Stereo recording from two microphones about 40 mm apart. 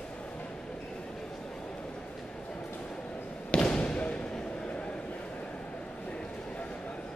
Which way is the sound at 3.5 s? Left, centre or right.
Left.